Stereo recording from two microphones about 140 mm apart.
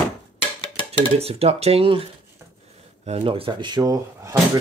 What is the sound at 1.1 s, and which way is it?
Speech, 45° right (ahead or behind).